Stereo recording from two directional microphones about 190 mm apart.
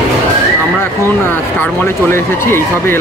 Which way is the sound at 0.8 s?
10° left (ahead or behind).